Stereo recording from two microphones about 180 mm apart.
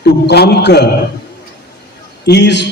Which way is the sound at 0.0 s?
65° left (ahead or behind).